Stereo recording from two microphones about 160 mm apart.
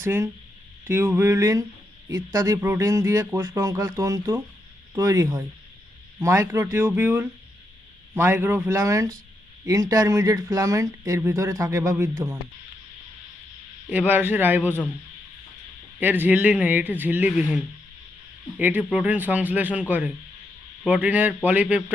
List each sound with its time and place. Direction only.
0.0 s speech: 15° right (ahead or behind)
13.9 s speech: 10° right (ahead or behind)
16.0 s speech: 10° right (ahead or behind)